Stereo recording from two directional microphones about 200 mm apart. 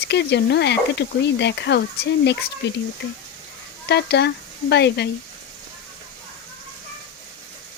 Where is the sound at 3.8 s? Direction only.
55° left (ahead or behind).